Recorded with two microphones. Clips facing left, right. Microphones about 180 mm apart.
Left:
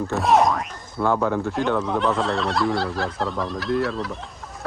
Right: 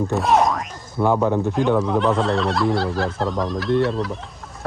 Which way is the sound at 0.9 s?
15° right (ahead or behind).